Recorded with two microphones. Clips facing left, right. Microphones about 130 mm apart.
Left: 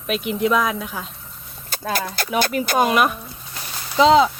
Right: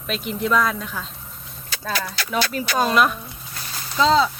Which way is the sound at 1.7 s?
50° left (ahead or behind).